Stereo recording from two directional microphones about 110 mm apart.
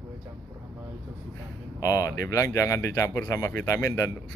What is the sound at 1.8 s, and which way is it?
Speech, 30° left (ahead or behind).